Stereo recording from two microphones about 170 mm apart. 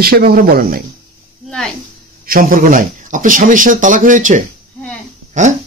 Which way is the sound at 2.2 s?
55° right (ahead or behind).